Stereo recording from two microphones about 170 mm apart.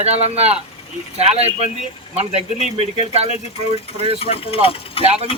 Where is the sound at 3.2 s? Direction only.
40° left (ahead or behind).